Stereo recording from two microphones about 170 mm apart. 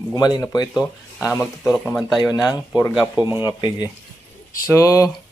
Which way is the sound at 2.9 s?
5° right (ahead or behind).